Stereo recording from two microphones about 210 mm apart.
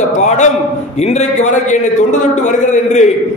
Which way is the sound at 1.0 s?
30° left (ahead or behind).